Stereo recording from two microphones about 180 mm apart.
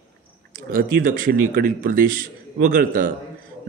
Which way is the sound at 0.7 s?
50° right (ahead or behind).